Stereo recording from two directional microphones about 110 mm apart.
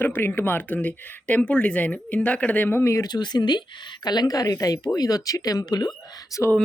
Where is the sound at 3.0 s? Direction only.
40° left (ahead or behind).